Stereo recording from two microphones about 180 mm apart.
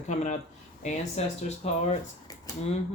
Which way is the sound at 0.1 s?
40° left (ahead or behind).